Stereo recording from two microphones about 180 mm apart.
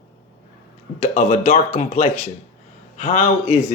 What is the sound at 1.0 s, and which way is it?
A man's voice, 40° left (ahead or behind).